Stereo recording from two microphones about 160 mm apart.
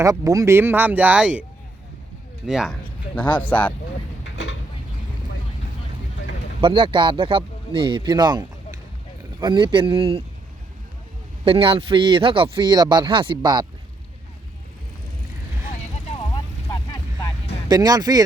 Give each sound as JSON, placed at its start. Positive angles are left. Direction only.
{"t": 0.0, "sound": "speech", "side_deg": -20}
{"t": 2.5, "sound": "speech", "side_deg": -5}
{"t": 3.2, "sound": "speech", "side_deg": 10}
{"t": 6.6, "sound": "speech", "side_deg": -30}
{"t": 11.4, "sound": "speech", "side_deg": -35}
{"t": 16.0, "sound": "vehicle", "side_deg": 30}
{"t": 17.7, "sound": "speech", "side_deg": -25}